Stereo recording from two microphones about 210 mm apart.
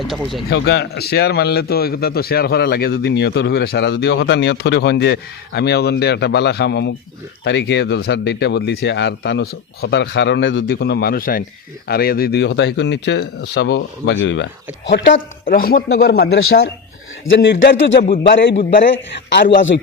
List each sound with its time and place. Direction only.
0.5 s speech: 55° left (ahead or behind)
15.4 s speech: 45° left (ahead or behind)
17.2 s speech: 60° left (ahead or behind)
18.5 s a man's voice: 35° left (ahead or behind)
19.3 s speech: 55° left (ahead or behind)